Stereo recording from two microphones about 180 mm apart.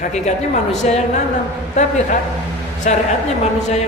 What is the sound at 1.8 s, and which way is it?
A man's voice, 40° left (ahead or behind).